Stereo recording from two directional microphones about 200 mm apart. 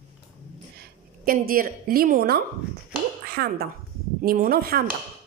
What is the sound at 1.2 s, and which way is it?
Speech, 45° right (ahead or behind).